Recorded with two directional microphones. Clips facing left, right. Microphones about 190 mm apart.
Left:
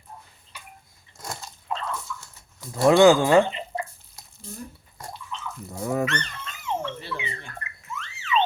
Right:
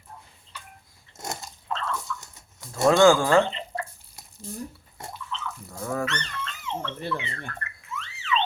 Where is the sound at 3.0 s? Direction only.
20° left (ahead or behind).